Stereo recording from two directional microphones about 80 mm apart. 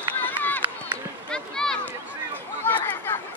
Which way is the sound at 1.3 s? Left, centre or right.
Centre.